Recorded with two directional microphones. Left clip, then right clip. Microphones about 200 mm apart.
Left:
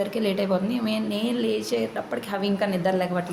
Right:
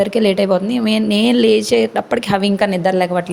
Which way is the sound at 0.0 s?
40° right (ahead or behind).